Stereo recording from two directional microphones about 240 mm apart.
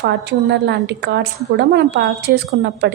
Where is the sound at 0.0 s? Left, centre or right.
Right.